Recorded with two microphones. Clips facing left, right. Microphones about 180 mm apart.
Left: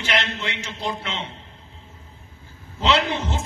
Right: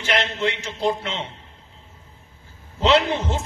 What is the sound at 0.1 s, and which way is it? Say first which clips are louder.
Speech: right 4 dB; 45° right (ahead or behind).